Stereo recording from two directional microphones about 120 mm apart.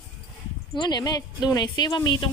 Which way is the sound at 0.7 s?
35° left (ahead or behind).